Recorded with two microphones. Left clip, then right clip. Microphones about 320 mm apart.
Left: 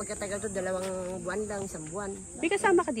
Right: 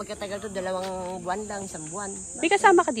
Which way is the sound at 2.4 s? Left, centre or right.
Centre.